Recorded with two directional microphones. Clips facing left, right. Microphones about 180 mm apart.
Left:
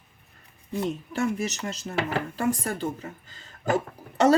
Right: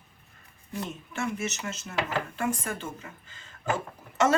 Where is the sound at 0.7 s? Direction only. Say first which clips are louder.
Left 7 dB; 35° left (ahead or behind).